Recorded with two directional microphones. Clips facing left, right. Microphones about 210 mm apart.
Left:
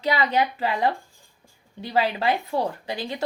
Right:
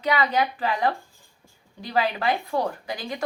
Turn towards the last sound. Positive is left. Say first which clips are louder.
# left 1 dB
turn(degrees=25)  # may be behind; listen again after turning